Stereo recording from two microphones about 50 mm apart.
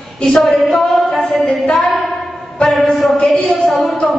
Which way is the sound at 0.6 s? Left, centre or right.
Centre.